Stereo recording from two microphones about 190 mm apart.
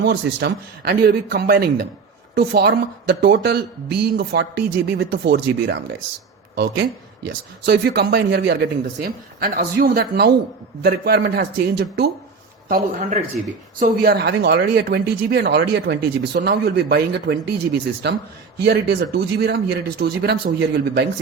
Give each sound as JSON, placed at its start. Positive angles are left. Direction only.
{"t": 0.0, "sound": "speech", "side_deg": -60}
{"t": 7.3, "sound": "speech", "side_deg": -60}